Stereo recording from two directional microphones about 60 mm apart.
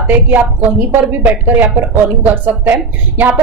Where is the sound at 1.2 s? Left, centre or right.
Right.